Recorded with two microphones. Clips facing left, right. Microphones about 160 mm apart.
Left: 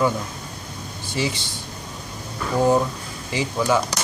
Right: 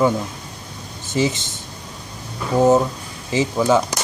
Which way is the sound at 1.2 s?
25° right (ahead or behind).